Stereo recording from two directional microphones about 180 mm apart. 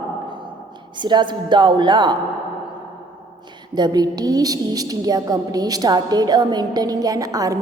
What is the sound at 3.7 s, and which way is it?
A woman's voice, 20° right (ahead or behind).